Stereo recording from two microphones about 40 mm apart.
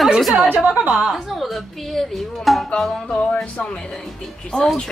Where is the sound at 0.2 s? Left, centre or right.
Centre.